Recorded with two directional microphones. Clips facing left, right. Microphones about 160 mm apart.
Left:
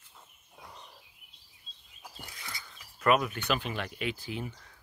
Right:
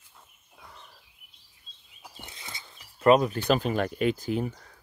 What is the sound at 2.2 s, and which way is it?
Speech, 25° right (ahead or behind).